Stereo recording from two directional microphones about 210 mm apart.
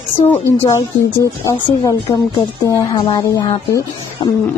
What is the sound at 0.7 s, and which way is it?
Speech, 15° left (ahead or behind).